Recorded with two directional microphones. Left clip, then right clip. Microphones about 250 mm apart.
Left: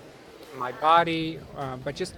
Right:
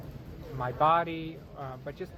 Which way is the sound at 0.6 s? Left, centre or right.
Left.